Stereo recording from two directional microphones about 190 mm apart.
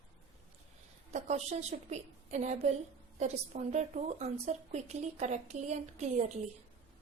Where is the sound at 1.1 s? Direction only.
35° right (ahead or behind).